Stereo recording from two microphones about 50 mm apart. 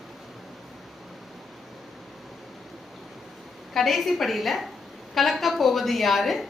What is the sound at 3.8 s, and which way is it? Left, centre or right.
Speech, centre.